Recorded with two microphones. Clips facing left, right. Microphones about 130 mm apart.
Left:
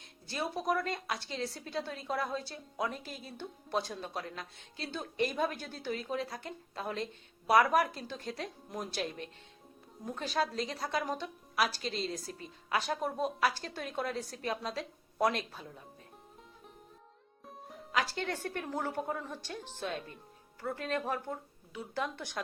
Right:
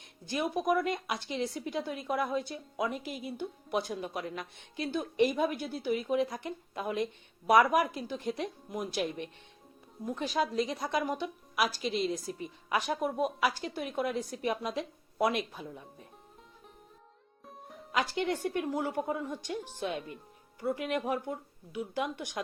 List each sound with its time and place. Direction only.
0.3 s a woman's voice: 15° right (ahead or behind)
17.4 s music: centre (ahead or behind)
17.9 s a woman's voice: 15° right (ahead or behind)